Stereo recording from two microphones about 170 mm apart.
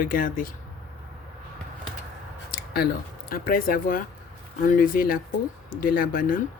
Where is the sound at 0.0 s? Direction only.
55° left (ahead or behind).